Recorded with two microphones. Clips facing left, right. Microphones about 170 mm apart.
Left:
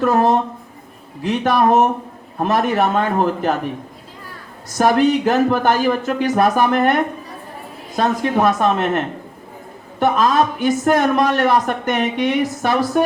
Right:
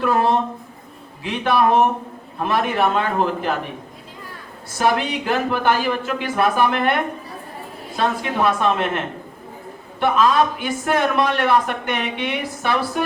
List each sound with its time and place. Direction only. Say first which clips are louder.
0.0 s a man's voice: left 3 dB; 40° left (ahead or behind)
4.8 s a man's voice: left 6 dB; 45° left (ahead or behind)
10.0 s a man's voice: left 1 dB; 40° left (ahead or behind)